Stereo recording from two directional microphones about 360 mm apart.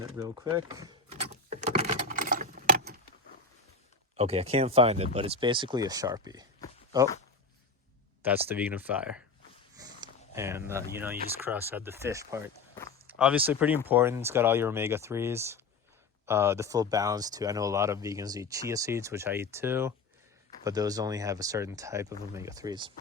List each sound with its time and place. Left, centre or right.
0.0 s keys jangling: centre; by 2.9 s right
4.2 s speech: centre
8.2 s speech: centre
9.7 s a sound: centre
10.9 s speech: centre